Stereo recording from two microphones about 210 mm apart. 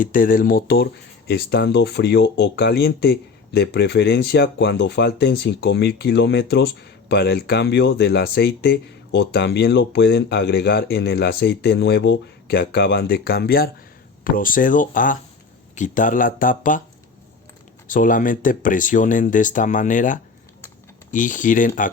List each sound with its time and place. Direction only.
0.0 s speech: 40° left (ahead or behind)
17.8 s speech: 40° left (ahead or behind)